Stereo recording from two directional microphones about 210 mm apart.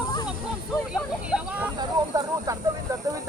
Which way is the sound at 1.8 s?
15° right (ahead or behind).